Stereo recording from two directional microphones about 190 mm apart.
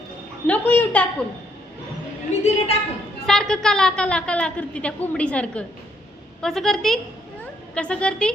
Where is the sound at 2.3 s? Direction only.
35° left (ahead or behind).